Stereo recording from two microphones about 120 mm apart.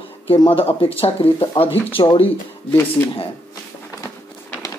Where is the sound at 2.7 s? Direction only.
20° left (ahead or behind).